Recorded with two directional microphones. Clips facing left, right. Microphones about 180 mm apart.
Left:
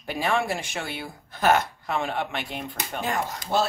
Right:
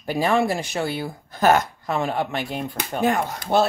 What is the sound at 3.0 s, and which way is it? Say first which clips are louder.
Speech: right 7 dB; 60° right (ahead or behind).